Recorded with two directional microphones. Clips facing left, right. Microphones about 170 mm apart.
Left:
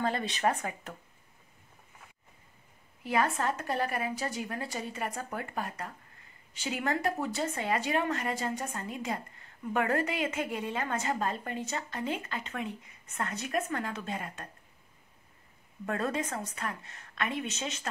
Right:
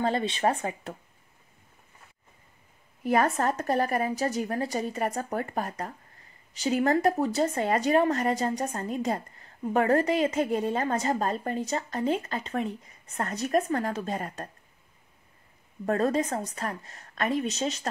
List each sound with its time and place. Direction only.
0.0 s speech: 30° right (ahead or behind)
3.0 s speech: 45° right (ahead or behind)
15.8 s speech: 40° right (ahead or behind)